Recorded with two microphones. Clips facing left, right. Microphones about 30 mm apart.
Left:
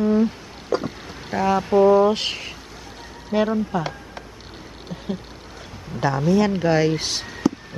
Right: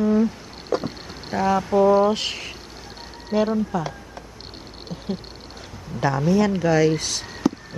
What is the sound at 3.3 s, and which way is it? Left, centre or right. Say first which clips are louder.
Speech: even; left.